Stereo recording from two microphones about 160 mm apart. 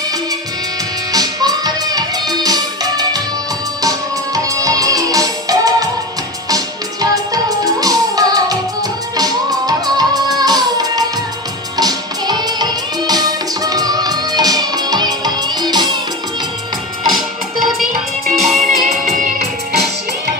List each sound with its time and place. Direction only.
1.1 s music: 25° right (ahead or behind)
18.4 s music: centre (ahead or behind)